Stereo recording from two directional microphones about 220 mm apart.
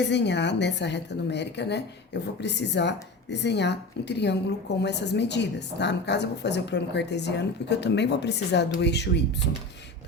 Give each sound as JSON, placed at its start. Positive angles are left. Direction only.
{"t": 0.0, "sound": "a woman's voice", "side_deg": 50}